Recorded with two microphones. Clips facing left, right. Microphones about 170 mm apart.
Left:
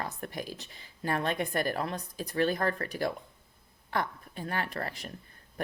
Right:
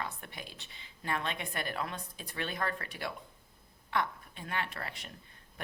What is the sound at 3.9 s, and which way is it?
A woman's voice, 40° left (ahead or behind).